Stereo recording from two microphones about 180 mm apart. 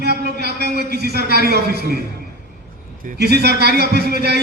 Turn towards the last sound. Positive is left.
turn(degrees=-65)  # may be behind; listen again after turning